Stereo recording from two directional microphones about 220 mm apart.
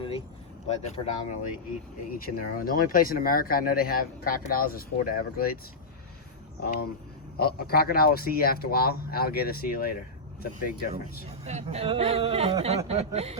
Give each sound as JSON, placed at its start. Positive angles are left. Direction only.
{"t": 0.9, "sound": "speech", "side_deg": 30}
{"t": 2.1, "sound": "speech", "side_deg": 40}
{"t": 6.6, "sound": "speech", "side_deg": 45}
{"t": 11.4, "sound": "speech", "side_deg": -30}